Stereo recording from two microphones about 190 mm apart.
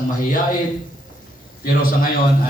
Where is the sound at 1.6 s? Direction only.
50° left (ahead or behind).